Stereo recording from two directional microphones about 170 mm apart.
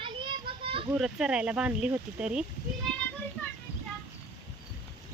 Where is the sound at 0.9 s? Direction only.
5° right (ahead or behind).